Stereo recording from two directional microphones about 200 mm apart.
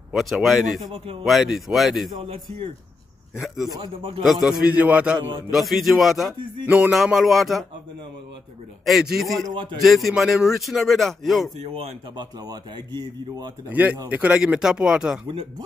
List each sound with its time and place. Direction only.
0.1 s a man's voice: centre (ahead or behind)
2.1 s speech: 30° right (ahead or behind)
3.3 s a man's voice: centre (ahead or behind)
3.7 s speech: 25° right (ahead or behind)
4.2 s a man's voice: centre (ahead or behind)
8.8 s a man's voice: centre (ahead or behind)
12.2 s speech: 20° right (ahead or behind)
13.7 s a man's voice: 10° right (ahead or behind)